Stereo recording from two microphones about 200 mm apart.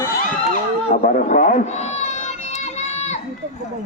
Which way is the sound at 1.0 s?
40° left (ahead or behind).